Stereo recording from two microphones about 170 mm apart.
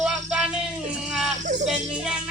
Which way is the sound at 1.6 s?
5° right (ahead or behind).